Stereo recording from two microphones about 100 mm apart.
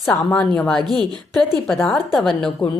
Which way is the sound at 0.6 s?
5° left (ahead or behind).